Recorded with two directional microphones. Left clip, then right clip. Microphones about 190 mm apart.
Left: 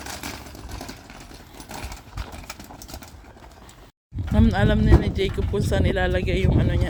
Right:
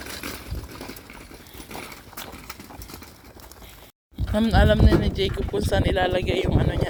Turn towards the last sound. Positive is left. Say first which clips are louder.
# right 1 dB
turn(degrees=15)  # may be behind; listen again after turning